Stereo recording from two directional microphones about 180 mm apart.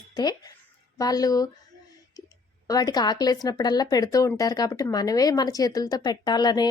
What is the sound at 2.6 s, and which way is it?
Speech, 20° left (ahead or behind).